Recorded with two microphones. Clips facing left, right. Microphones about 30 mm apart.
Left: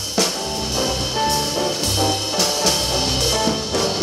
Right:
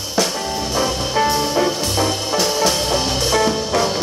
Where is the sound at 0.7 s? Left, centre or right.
Centre.